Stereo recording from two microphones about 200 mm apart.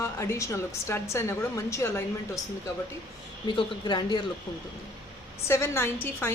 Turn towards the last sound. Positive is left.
turn(degrees=10)  # may be behind; listen again after turning